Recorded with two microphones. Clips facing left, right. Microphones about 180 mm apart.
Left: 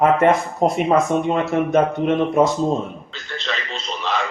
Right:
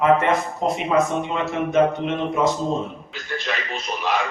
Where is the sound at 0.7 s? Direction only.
50° left (ahead or behind).